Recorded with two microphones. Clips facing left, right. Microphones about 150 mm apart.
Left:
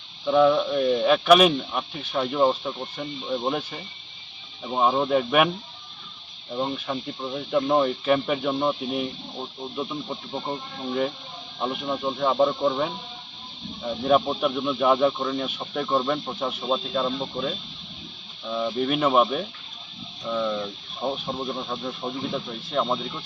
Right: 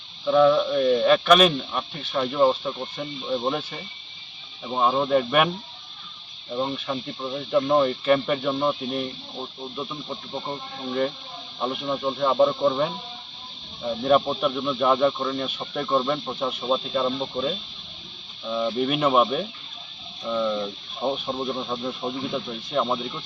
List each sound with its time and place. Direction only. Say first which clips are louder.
0.3 s speech: right 1 dB; 10° left (ahead or behind)
6.5 s speech: right 1 dB; centre (ahead or behind)